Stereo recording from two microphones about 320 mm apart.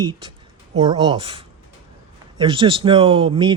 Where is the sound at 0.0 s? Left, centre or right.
Centre.